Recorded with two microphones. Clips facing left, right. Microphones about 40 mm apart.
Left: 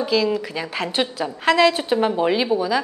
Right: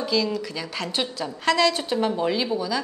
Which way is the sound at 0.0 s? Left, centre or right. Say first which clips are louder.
Left 4 dB; centre.